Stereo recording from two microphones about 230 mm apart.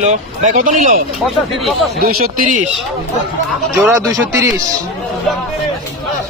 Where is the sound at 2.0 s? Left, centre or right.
Right.